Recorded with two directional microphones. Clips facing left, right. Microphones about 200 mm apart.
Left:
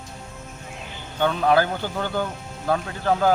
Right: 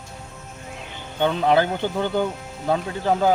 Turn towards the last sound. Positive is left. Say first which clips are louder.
# right 1 dB
turn(degrees=-20)  # may be behind; listen again after turning